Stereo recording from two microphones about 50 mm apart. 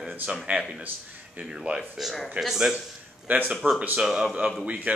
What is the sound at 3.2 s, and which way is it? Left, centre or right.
Speech, right.